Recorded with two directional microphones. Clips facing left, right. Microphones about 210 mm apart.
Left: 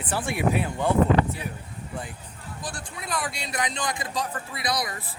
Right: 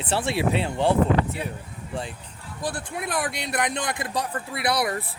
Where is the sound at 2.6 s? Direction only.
55° right (ahead or behind).